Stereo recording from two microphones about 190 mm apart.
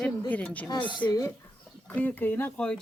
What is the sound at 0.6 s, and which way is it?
Speech, 25° left (ahead or behind).